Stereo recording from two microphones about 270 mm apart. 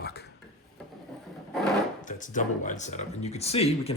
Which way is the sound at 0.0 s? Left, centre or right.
Left.